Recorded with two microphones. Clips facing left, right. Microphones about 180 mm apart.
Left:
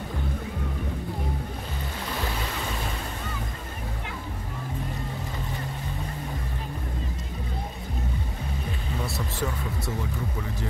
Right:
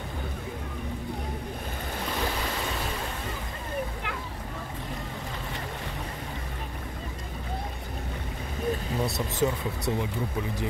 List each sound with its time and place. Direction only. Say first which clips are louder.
9.0 s speech: right 4 dB; 20° right (ahead or behind)